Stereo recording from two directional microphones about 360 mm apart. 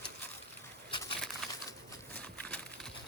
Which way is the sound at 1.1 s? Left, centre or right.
Centre.